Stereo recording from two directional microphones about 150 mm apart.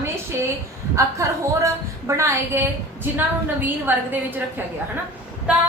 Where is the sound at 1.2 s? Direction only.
20° right (ahead or behind).